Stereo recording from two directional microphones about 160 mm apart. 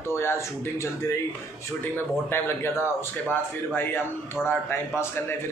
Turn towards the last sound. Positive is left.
turn(degrees=15)  # may be behind; listen again after turning